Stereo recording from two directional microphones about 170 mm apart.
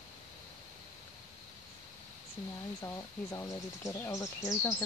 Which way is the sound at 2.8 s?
20° left (ahead or behind).